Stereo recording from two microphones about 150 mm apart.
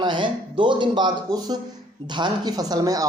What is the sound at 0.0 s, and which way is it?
Speech, 30° right (ahead or behind).